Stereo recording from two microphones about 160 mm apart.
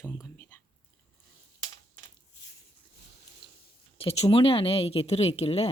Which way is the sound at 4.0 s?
40° left (ahead or behind).